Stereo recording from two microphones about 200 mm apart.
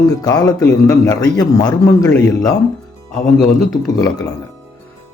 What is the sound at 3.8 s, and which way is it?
Speech, 15° left (ahead or behind).